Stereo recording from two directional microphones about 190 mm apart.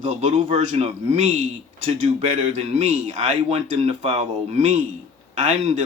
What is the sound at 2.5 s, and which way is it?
Speech, 35° right (ahead or behind).